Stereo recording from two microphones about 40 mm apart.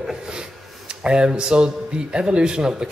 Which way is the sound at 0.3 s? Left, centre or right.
Right.